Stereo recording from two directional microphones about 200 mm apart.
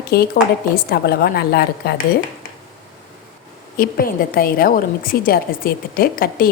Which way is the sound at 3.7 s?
45° left (ahead or behind).